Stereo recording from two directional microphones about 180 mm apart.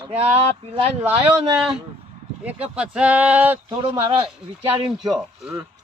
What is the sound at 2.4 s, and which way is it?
Speech, 10° right (ahead or behind).